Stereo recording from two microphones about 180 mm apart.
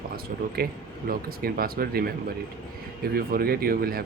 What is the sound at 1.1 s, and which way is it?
Speech, 55° right (ahead or behind).